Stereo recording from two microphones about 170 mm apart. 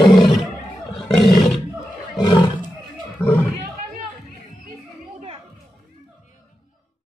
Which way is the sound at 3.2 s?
10° left (ahead or behind).